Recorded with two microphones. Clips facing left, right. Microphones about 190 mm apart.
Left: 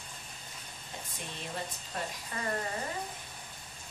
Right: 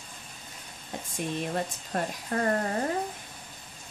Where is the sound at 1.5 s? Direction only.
55° right (ahead or behind).